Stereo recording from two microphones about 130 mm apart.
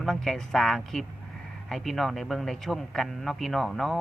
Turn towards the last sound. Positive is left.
turn(degrees=0)  # may be behind; listen again after turning